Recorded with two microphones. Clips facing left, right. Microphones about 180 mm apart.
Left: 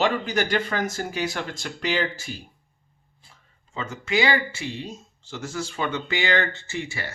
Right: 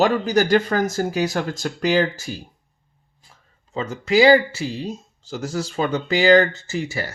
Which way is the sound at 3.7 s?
35° right (ahead or behind).